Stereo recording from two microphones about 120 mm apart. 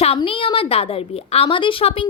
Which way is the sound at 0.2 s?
50° left (ahead or behind).